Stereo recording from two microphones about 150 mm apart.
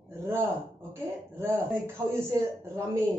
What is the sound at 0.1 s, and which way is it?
A woman's voice, 15° right (ahead or behind).